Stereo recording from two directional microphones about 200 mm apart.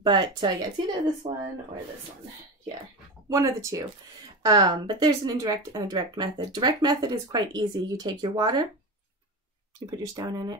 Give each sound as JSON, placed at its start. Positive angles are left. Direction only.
{"t": 0.0, "sound": "speech", "side_deg": -25}
{"t": 3.3, "sound": "speech", "side_deg": -15}
{"t": 9.8, "sound": "speech", "side_deg": -20}